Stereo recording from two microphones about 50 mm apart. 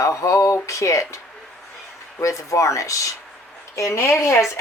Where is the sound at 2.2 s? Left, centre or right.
Left.